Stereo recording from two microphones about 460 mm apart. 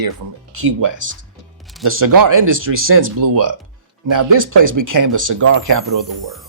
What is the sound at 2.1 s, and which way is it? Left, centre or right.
Speech, right.